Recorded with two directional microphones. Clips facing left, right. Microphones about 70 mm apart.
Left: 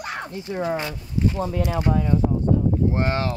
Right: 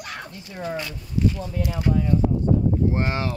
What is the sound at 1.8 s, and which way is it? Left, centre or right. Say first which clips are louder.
Speech: even; left.